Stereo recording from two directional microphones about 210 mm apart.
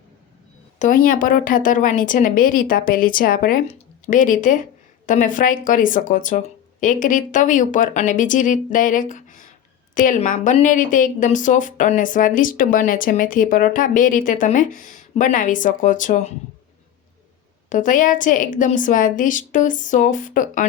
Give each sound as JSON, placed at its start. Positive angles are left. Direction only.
{"t": 0.8, "sound": "speech", "side_deg": 40}
{"t": 17.7, "sound": "speech", "side_deg": 40}